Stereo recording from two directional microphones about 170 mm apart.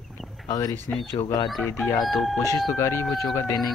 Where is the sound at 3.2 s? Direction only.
20° left (ahead or behind).